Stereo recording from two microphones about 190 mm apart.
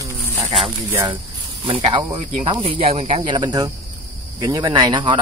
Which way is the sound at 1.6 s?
25° right (ahead or behind).